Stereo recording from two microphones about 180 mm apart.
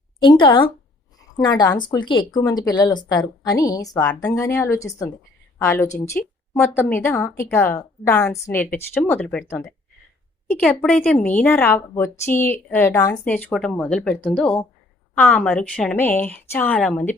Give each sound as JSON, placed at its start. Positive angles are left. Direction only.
{"t": 0.2, "sound": "a woman's voice", "side_deg": 25}